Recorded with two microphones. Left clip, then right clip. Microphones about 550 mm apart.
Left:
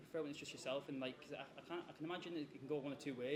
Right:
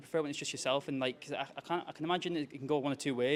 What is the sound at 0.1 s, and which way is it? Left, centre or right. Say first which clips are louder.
Speech: right 11 dB; right.